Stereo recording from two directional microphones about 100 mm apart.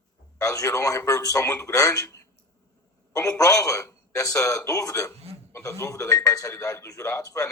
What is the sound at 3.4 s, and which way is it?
A man's voice, 35° left (ahead or behind).